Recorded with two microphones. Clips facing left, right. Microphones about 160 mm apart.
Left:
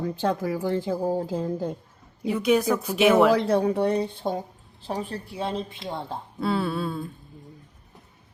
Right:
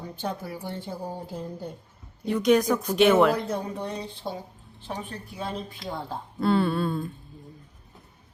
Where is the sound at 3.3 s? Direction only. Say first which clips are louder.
Left 8 dB; 70° left (ahead or behind); by 4.3 s 55° left (ahead or behind).